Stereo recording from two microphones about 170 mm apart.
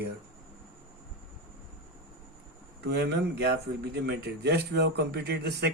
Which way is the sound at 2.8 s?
85° right.